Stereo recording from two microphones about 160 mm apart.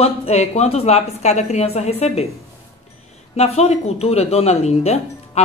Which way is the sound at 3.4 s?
40° left (ahead or behind).